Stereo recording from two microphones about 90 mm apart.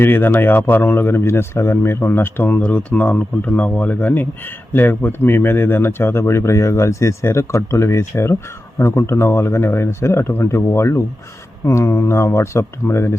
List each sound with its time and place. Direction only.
0.0 s speech: 25° left (ahead or behind)